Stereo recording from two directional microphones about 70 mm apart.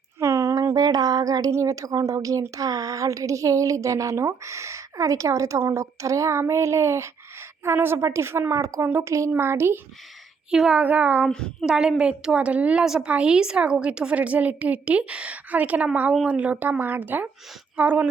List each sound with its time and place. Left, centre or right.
0.2 s a woman's voice: right
7.6 s a woman's voice: right
8.9 s speech: right
10.5 s a woman's voice: centre
10.8 s a woman's voice: right
11.3 s a woman's voice: centre
11.6 s a woman's voice: centre
12.8 s a woman's voice: centre